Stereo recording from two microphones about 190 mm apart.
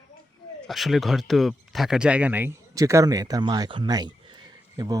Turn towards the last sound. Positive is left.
turn(degrees=-20)  # may be behind; listen again after turning